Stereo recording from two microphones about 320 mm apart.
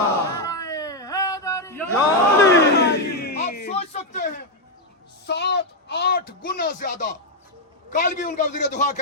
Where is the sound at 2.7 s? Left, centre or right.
Left.